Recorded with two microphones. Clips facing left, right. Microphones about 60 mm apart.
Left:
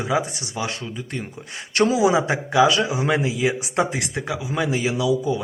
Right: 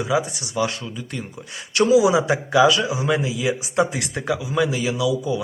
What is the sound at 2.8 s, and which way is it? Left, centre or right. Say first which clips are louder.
Speech: left 1 dB; left.